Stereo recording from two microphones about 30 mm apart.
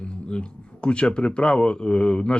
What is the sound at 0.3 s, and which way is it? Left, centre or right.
Speech, left.